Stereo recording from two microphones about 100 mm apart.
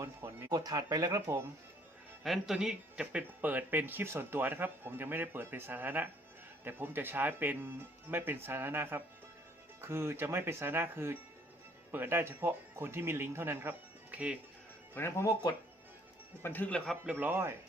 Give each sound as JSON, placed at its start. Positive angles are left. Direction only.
{"t": 0.0, "sound": "speech", "side_deg": -25}
{"t": 0.4, "sound": "speech", "side_deg": -40}
{"t": 2.2, "sound": "speech", "side_deg": 0}
{"t": 14.9, "sound": "speech", "side_deg": 25}
{"t": 16.4, "sound": "speech", "side_deg": 20}
{"t": 17.1, "sound": "speech", "side_deg": -20}